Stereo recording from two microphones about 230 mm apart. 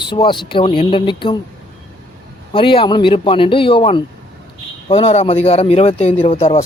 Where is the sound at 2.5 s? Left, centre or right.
Left.